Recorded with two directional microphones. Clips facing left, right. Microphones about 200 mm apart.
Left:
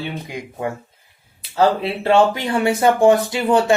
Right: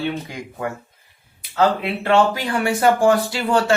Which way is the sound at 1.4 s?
30° left (ahead or behind).